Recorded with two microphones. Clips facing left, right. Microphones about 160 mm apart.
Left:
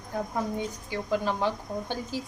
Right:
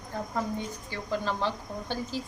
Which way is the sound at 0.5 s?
15° left (ahead or behind).